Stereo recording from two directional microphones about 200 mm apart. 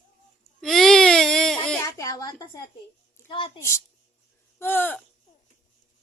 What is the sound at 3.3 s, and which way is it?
Speech, 25° left (ahead or behind).